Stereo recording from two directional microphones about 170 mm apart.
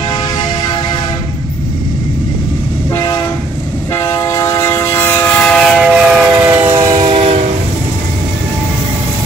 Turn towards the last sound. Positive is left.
turn(degrees=-40)  # may be behind; listen again after turning